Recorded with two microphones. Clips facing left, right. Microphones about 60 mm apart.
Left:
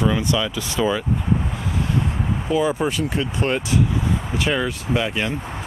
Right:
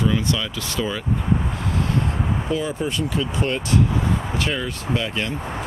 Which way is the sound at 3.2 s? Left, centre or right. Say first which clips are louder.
Left 1 dB; centre.